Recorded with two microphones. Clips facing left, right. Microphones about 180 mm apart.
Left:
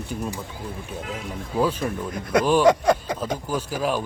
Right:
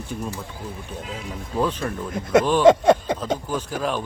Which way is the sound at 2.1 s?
25° right (ahead or behind).